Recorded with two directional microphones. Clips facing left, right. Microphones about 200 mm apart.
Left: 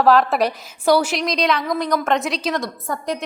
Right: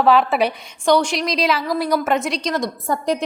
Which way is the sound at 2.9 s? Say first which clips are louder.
Right 5 dB; 30° right (ahead or behind).